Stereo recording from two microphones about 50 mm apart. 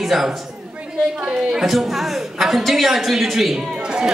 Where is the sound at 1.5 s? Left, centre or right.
Centre.